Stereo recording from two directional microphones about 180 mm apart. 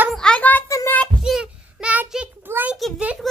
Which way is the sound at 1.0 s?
Centre (ahead or behind).